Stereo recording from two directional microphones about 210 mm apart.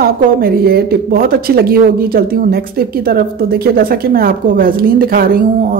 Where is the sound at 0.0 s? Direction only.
45° right (ahead or behind).